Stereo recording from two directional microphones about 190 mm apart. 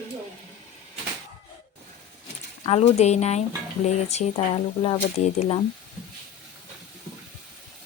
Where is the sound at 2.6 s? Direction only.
35° left (ahead or behind).